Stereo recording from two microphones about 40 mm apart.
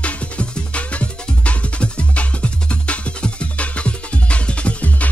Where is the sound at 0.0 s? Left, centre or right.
Left.